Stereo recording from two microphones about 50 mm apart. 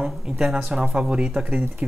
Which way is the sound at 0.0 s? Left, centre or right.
Centre.